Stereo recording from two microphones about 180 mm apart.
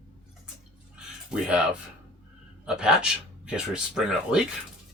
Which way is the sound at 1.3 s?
5° right (ahead or behind).